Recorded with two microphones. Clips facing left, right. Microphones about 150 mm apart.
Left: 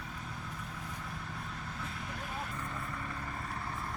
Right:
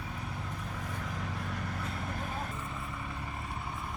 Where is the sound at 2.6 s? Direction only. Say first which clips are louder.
Even; 5° right (ahead or behind).